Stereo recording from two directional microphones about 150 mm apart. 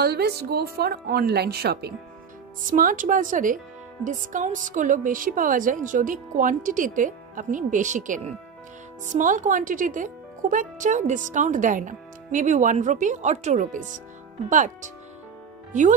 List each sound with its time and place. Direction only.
0.0 s speech: 90° right
2.7 s a woman's voice: 65° right (ahead or behind)